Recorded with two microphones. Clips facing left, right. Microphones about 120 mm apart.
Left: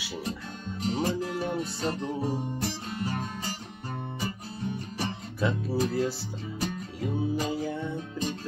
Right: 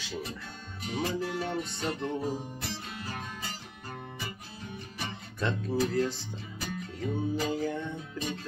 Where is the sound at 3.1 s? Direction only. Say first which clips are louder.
Left 5 dB; 35° left (ahead or behind).